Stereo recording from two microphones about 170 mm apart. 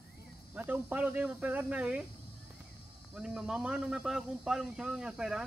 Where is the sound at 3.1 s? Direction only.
5° right (ahead or behind).